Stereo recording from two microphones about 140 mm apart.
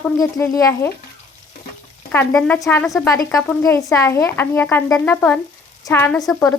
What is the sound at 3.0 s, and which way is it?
Speech, 25° left (ahead or behind).